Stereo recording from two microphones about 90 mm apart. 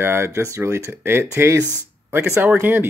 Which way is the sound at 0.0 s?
30° right (ahead or behind).